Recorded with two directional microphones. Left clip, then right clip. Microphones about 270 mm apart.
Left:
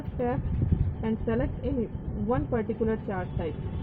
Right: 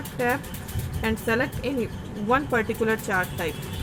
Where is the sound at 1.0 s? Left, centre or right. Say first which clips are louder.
Right 6 dB; centre.